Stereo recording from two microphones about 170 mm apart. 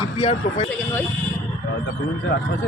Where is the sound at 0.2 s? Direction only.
40° left (ahead or behind).